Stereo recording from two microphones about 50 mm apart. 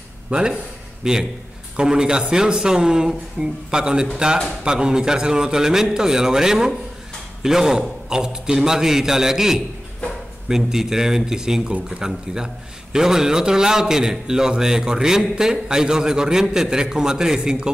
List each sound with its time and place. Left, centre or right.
0.3 s a man's voice: centre